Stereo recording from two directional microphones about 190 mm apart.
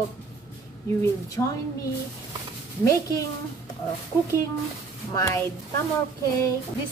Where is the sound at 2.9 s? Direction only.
15° left (ahead or behind).